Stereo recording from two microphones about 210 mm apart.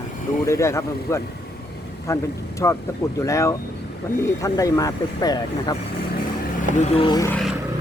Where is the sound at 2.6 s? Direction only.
15° left (ahead or behind).